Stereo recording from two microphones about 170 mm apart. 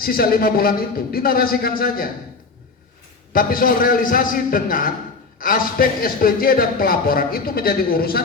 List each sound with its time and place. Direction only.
0.0 s a man's voice: 60° left (ahead or behind)
3.3 s a man's voice: 55° left (ahead or behind)